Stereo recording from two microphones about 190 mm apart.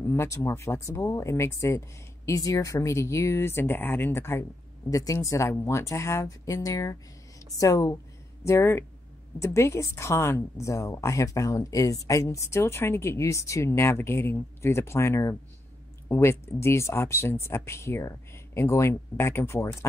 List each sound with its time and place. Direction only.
0.0 s speech: 15° left (ahead or behind)